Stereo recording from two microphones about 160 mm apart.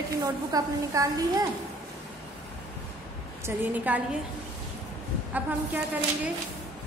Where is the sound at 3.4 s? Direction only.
10° right (ahead or behind).